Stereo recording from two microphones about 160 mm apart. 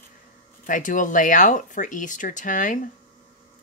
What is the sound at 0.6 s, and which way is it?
Speech, 55° left (ahead or behind).